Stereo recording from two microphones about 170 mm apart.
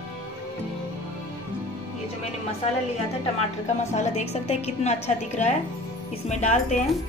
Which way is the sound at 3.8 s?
40° left (ahead or behind).